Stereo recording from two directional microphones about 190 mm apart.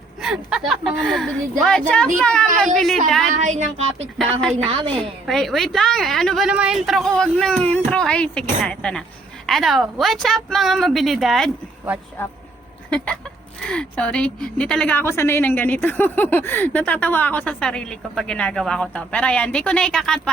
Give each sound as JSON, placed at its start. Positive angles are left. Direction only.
{"t": 0.2, "sound": "a woman's voice", "side_deg": 0}
{"t": 3.3, "sound": "speech", "side_deg": -40}
{"t": 4.2, "sound": "a woman's voice", "side_deg": 5}
{"t": 4.5, "sound": "a woman's voice", "side_deg": -30}
{"t": 5.2, "sound": "a woman's voice", "side_deg": 0}
{"t": 13.6, "sound": "a woman's voice", "side_deg": 5}